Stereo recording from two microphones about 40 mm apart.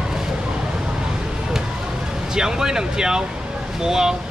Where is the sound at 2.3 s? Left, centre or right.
Centre.